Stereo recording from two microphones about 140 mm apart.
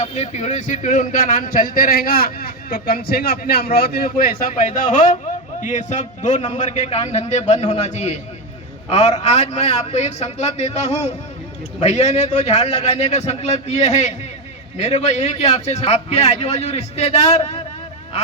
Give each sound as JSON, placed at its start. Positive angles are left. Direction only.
{"t": 0.0, "sound": "a man's voice", "side_deg": 55}
{"t": 5.6, "sound": "a man's voice", "side_deg": 60}